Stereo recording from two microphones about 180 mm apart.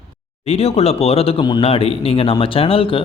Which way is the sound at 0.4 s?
35° left (ahead or behind).